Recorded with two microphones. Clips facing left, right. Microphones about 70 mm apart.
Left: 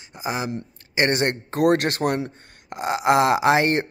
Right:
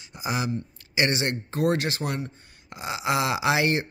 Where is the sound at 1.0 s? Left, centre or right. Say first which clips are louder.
Left 4 dB; left.